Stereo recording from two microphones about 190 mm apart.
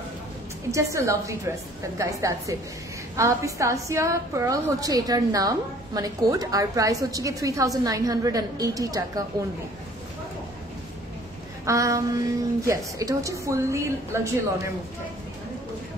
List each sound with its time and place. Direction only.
0.7 s a woman's voice: 15° right (ahead or behind)
11.6 s a woman's voice: 15° right (ahead or behind)